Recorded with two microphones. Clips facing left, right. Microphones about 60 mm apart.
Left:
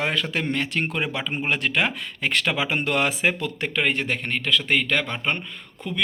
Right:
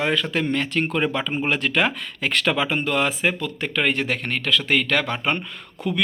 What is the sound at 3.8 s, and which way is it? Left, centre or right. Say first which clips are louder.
Speech: right 2 dB; centre.